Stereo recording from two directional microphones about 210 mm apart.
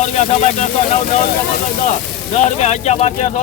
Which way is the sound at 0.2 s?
30° left (ahead or behind).